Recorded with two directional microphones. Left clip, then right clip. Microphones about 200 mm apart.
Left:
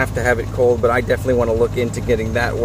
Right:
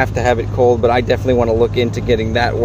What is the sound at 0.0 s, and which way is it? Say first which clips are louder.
Speech: right 3 dB; 20° right (ahead or behind).